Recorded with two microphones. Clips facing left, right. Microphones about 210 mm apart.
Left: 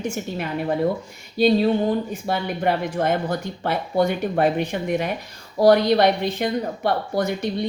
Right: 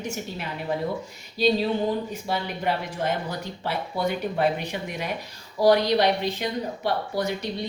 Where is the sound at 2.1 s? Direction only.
55° left (ahead or behind).